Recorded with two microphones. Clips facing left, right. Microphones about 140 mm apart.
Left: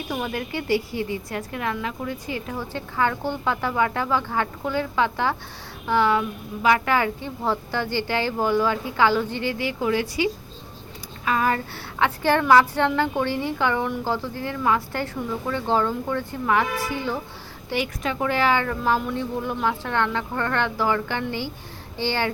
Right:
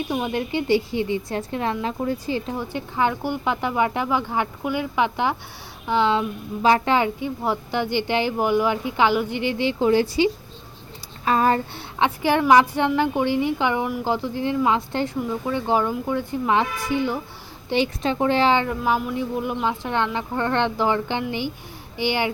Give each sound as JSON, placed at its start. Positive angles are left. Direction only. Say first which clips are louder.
{"t": 0.1, "sound": "a woman's voice", "louder": "right 1 dB", "side_deg": -20}
{"t": 2.6, "sound": "a woman's voice", "louder": "right 1 dB", "side_deg": -20}
{"t": 11.3, "sound": "a sound", "louder": "right 3 dB", "side_deg": -30}
{"t": 11.9, "sound": "a woman's voice", "louder": "right 1 dB", "side_deg": -15}
{"t": 18.8, "sound": "a woman's voice", "louder": "right 1 dB", "side_deg": -10}